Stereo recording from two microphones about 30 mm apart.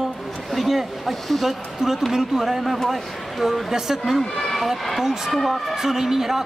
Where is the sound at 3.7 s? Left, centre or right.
Centre.